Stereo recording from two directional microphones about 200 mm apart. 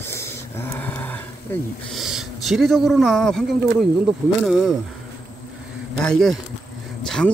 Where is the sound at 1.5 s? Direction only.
10° left (ahead or behind).